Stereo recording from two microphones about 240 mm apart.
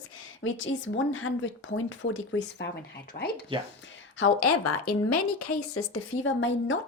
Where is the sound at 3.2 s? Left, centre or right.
Left.